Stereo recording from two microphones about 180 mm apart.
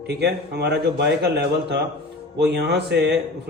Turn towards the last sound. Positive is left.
turn(degrees=-70)  # may be behind; listen again after turning